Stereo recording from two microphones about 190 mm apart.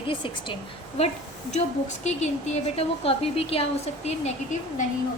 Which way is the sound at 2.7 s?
30° left (ahead or behind).